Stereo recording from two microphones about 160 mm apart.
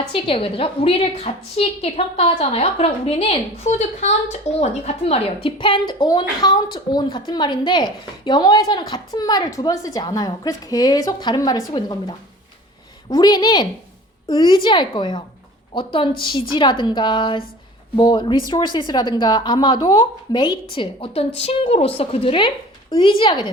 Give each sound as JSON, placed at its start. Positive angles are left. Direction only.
{"t": 0.1, "sound": "a woman's voice", "side_deg": 35}